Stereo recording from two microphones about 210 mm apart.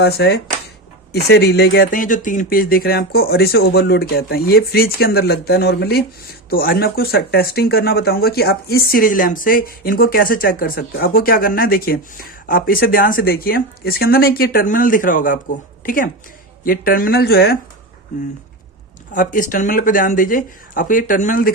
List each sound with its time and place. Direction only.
0.0 s a woman's voice: 50° left (ahead or behind)
19.1 s speech: 40° left (ahead or behind)